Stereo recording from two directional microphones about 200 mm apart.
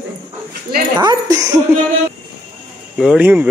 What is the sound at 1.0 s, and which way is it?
Speech, 20° right (ahead or behind).